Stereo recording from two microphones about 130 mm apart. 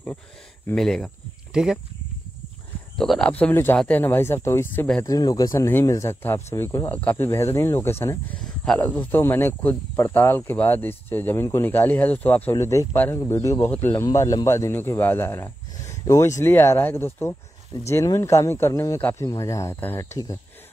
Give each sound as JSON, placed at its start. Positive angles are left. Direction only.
{"t": 0.7, "sound": "speech", "side_deg": 5}
{"t": 3.0, "sound": "speech", "side_deg": 5}
{"t": 8.4, "sound": "speech", "side_deg": 5}